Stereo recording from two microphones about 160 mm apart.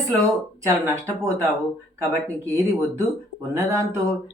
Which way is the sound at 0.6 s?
20° right (ahead or behind).